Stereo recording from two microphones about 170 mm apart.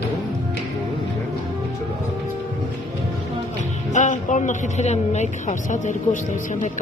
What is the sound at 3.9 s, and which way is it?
A woman's voice, 45° left (ahead or behind).